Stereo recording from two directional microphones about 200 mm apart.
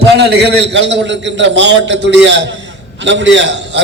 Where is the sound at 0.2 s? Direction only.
55° right (ahead or behind).